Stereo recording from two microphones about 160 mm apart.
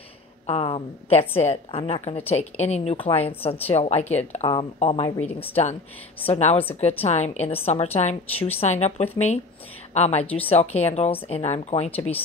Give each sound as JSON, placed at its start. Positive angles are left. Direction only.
{"t": 0.5, "sound": "speech", "side_deg": 35}
{"t": 5.1, "sound": "a woman's voice", "side_deg": 10}
{"t": 5.5, "sound": "speech", "side_deg": 45}